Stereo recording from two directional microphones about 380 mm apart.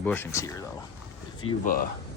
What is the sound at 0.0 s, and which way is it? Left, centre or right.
Speech, centre.